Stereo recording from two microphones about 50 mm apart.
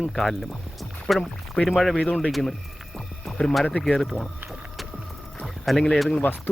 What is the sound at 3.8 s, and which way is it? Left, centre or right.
Speech, centre.